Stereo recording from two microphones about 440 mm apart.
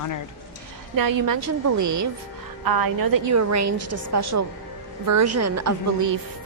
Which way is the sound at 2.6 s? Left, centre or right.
Right.